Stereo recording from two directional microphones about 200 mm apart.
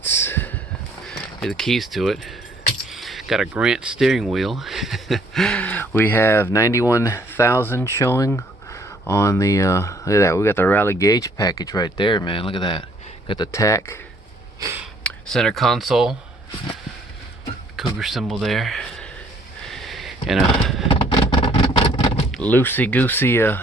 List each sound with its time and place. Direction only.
0.0 s a sound: 10° left (ahead or behind)
1.0 s speech: centre (ahead or behind)
15.0 s speech: 5° left (ahead or behind)
17.7 s speech: centre (ahead or behind)
19.6 s a sound: centre (ahead or behind)
20.8 s vehicle: 25° left (ahead or behind)
22.4 s speech: 10° left (ahead or behind)